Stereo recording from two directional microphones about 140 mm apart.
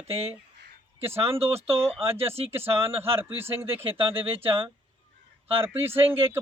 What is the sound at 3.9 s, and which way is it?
Speech, 40° right (ahead or behind).